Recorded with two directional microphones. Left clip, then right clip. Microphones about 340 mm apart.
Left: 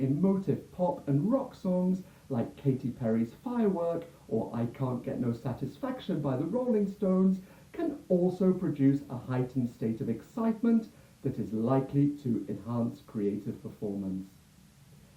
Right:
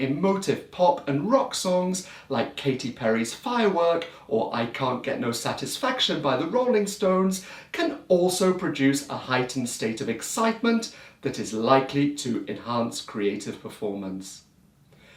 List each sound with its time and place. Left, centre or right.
0.0 s speech: centre
0.8 s speech: right
1.0 s speech: centre
4.3 s speech: right
4.5 s speech: centre
9.0 s speech: centre
9.3 s speech: centre
13.8 s speech: right